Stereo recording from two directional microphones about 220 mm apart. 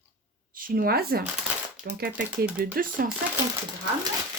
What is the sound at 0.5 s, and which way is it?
A woman's voice, 40° right (ahead or behind).